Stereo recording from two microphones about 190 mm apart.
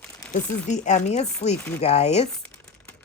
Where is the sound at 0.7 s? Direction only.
35° left (ahead or behind).